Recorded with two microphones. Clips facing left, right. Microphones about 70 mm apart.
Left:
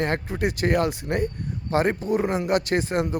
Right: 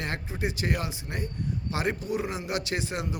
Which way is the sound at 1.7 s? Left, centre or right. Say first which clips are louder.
Left 8 dB; left.